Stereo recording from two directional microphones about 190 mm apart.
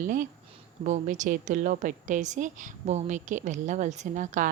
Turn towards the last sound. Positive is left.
turn(degrees=-40)  # may be behind; listen again after turning